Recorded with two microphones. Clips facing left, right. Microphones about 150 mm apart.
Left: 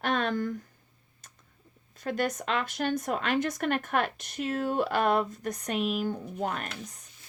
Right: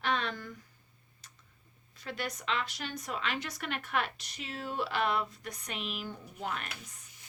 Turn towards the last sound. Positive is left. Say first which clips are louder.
# left 6 dB
turn(degrees=45)  # may be behind; listen again after turning